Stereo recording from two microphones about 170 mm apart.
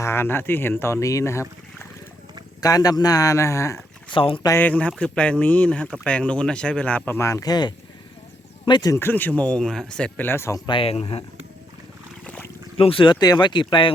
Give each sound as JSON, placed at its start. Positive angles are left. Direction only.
{"t": 0.0, "sound": "speech", "side_deg": 15}
{"t": 4.1, "sound": "speech", "side_deg": 30}
{"t": 4.4, "sound": "speech", "side_deg": 10}
{"t": 10.7, "sound": "speech", "side_deg": 35}
{"t": 12.2, "sound": "boat", "side_deg": 10}
{"t": 12.7, "sound": "speech", "side_deg": 30}